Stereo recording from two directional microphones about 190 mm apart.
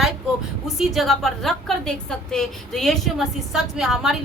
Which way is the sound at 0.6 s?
Centre (ahead or behind).